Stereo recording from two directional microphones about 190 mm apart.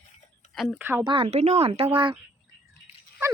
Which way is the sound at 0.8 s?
10° right (ahead or behind).